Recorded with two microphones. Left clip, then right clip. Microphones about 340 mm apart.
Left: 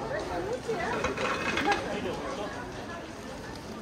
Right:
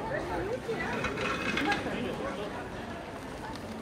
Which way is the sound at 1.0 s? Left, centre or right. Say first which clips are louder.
Left 2 dB; left.